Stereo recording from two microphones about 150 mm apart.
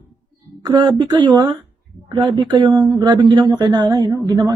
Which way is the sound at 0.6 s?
30° right (ahead or behind).